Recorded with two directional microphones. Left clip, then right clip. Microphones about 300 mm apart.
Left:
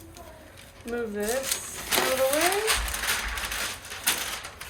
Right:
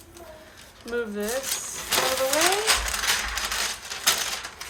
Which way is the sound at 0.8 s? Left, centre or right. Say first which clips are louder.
Right 1 dB; centre.